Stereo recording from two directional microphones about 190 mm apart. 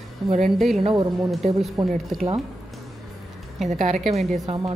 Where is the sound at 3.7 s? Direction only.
40° right (ahead or behind).